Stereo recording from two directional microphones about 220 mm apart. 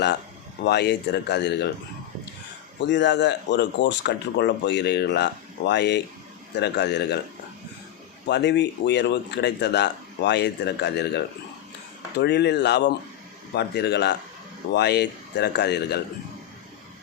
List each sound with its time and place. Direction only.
0.6 s speech: 50° left (ahead or behind)
2.8 s speech: 55° left (ahead or behind)
8.3 s speech: 50° left (ahead or behind)